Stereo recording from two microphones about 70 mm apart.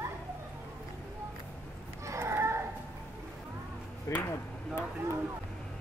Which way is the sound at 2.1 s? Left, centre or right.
Right.